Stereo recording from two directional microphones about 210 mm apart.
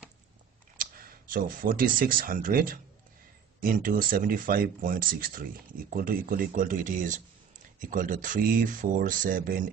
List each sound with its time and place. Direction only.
0.7 s speech: 40° right (ahead or behind)